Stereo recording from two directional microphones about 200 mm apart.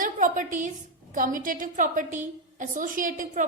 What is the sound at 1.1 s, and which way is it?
A woman's voice, 40° right (ahead or behind).